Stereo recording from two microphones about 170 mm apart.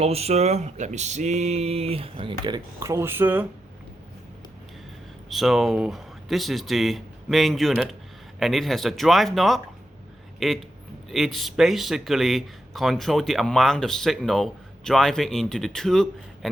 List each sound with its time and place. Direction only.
0.0 s speech: 35° right (ahead or behind); by 3.4 s 10° right (ahead or behind)
5.3 s speech: centre (ahead or behind)